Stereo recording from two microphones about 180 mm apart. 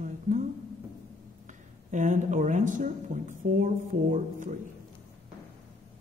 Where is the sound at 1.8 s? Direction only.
45° right (ahead or behind).